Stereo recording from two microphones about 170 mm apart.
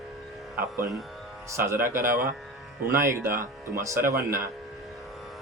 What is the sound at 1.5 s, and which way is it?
Speech, 15° right (ahead or behind).